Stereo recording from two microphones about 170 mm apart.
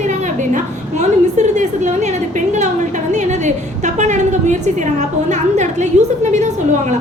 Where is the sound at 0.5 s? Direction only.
45° right (ahead or behind).